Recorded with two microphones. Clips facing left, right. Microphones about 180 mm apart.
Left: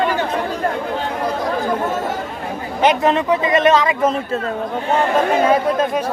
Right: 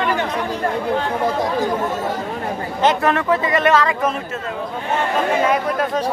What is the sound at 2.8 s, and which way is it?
Speech, 20° left (ahead or behind).